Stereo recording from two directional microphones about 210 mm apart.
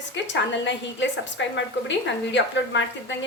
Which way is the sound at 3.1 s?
60° left (ahead or behind).